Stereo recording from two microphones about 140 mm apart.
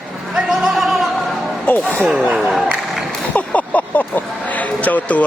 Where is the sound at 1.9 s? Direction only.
Centre (ahead or behind).